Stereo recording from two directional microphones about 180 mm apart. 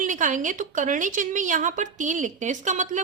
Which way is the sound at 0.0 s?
45° right (ahead or behind).